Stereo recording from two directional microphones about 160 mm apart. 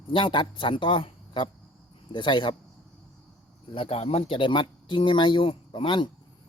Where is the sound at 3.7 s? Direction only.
40° left (ahead or behind).